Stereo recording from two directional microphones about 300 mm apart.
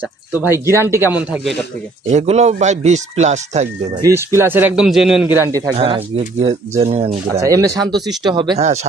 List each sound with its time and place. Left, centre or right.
0.9 s speech: centre
2.0 s speech: right
4.0 s speech: centre
5.5 s speech: centre